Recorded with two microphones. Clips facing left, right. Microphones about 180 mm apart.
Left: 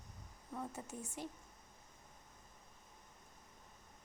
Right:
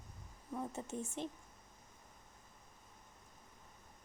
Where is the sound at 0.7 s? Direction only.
25° right (ahead or behind).